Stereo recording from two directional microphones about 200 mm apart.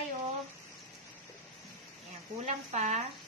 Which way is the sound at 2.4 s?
35° right (ahead or behind).